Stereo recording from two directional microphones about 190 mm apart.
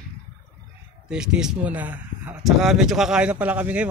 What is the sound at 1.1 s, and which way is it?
Speech, 5° right (ahead or behind).